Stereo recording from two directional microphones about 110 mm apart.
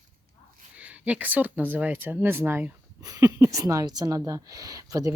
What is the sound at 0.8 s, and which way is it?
Speech, 15° right (ahead or behind).